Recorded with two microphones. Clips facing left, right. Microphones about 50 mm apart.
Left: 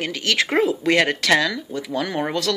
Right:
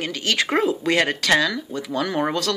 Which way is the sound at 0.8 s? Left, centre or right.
Left.